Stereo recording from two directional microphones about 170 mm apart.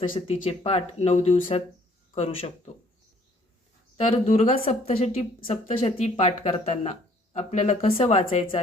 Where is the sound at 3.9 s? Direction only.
40° left (ahead or behind).